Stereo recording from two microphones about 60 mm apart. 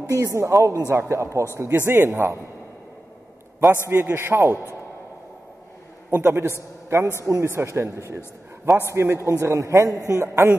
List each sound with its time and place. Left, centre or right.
0.1 s a man's voice: right
3.9 s a man's voice: right
6.0 s a man's voice: right
9.8 s speech: right